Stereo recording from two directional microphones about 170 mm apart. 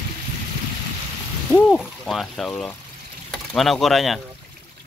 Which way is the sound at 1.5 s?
Centre (ahead or behind).